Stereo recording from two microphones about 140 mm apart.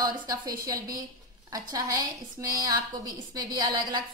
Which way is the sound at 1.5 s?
25° right (ahead or behind).